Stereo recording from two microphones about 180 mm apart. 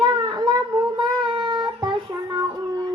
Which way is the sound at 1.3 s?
25° right (ahead or behind).